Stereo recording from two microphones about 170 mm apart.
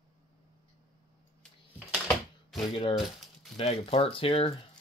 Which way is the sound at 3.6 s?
35° left (ahead or behind).